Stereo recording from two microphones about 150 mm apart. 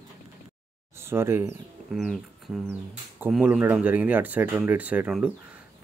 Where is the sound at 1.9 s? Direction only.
Centre (ahead or behind).